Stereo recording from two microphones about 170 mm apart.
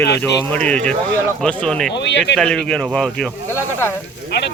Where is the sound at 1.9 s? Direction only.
90° left.